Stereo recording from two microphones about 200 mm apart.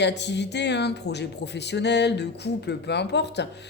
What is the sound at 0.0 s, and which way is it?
Speech, 60° left (ahead or behind).